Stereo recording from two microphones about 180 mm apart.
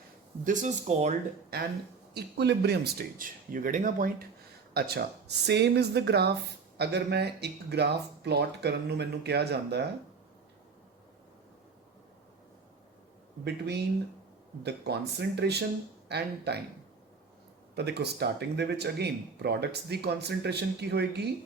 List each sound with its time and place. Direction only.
0.4 s speech: 45° right (ahead or behind)
1.5 s speech: 55° right (ahead or behind)
2.1 s speech: 70° right (ahead or behind); by 4.1 s 45° right (ahead or behind)
4.7 s speech: 60° right (ahead or behind)
13.4 s speech: 65° right (ahead or behind)
17.7 s speech: 65° right (ahead or behind)